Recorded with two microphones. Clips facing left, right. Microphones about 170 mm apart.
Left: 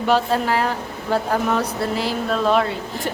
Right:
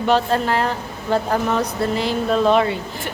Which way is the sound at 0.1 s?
10° left (ahead or behind).